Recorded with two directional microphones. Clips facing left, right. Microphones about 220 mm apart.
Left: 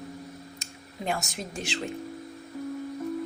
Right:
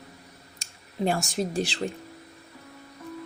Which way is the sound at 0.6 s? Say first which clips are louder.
Right 8 dB; 35° right (ahead or behind).